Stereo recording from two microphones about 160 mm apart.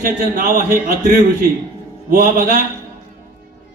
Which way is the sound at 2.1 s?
55° right (ahead or behind).